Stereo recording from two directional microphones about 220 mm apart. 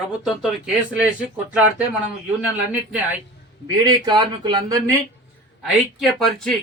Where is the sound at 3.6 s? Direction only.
20° right (ahead or behind).